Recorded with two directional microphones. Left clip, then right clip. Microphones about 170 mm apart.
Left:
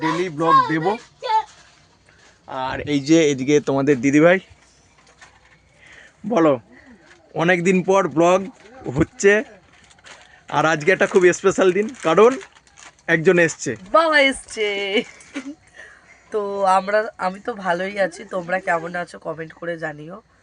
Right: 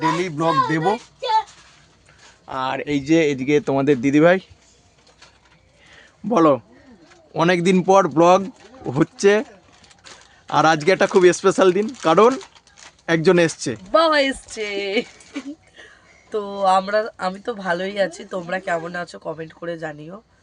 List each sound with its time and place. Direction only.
0.2 s speech: 15° right (ahead or behind)
2.6 s speech: 30° right (ahead or behind)
2.8 s speech: 5° left (ahead or behind)
5.9 s a sound: 10° right (ahead or behind)
7.3 s speech: 15° right (ahead or behind)
10.5 s speech: 15° right (ahead or behind)
13.9 s speech: centre (ahead or behind)